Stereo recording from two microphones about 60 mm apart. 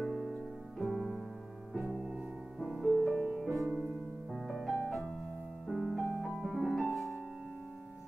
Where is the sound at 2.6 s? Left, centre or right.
Centre.